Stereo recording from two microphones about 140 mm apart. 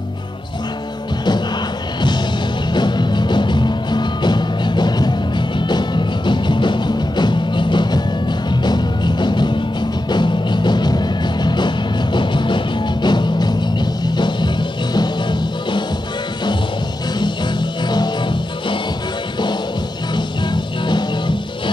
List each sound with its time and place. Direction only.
2.7 s music: 30° left (ahead or behind)
17.2 s music: 30° left (ahead or behind)
20.2 s music: 35° left (ahead or behind)